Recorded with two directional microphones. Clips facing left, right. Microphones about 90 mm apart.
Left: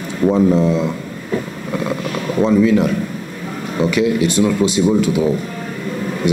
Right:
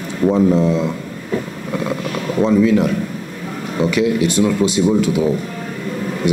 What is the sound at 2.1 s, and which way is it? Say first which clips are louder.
Speech: even; 20° left (ahead or behind).